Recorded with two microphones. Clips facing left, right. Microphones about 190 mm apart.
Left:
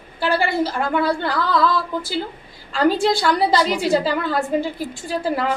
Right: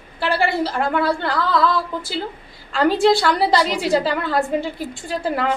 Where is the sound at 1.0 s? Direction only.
Centre (ahead or behind).